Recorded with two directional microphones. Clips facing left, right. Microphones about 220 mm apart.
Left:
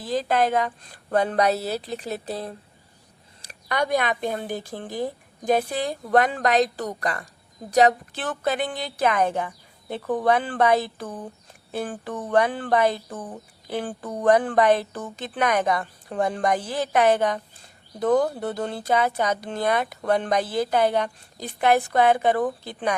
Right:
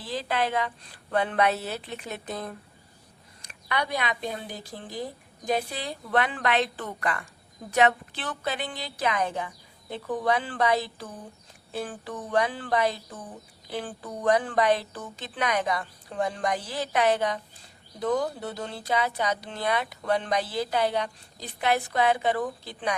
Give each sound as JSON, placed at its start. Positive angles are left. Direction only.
{"t": 0.0, "sound": "a woman's voice", "side_deg": 45}
{"t": 3.4, "sound": "speech", "side_deg": 45}